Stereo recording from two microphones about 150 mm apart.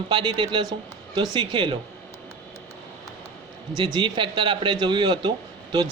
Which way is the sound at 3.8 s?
30° right (ahead or behind).